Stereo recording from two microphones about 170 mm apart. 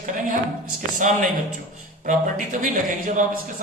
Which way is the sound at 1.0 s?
50° right (ahead or behind).